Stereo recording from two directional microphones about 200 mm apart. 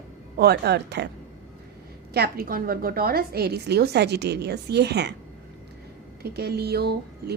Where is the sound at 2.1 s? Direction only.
45° right (ahead or behind).